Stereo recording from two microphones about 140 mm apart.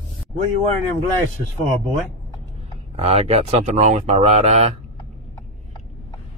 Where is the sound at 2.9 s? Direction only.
45° right (ahead or behind).